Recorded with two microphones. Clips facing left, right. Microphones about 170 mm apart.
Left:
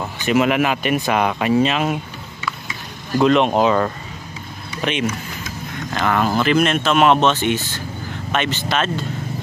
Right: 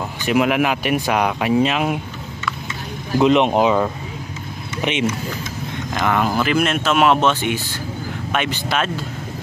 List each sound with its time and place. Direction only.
0.3 s speech: 10° right (ahead or behind)
3.2 s speech: 15° right (ahead or behind)
4.8 s speech: 20° right (ahead or behind)